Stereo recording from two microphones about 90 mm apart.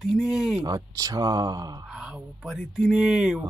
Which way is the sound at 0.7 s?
45° right (ahead or behind).